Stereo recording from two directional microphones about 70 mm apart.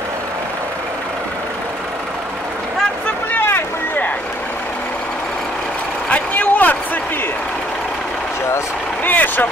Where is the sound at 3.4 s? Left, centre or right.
Left.